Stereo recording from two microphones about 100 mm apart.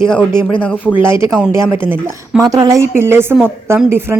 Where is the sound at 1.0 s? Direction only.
25° right (ahead or behind).